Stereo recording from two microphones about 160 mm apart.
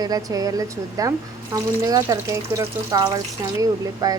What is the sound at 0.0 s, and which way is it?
Speech, 20° right (ahead or behind).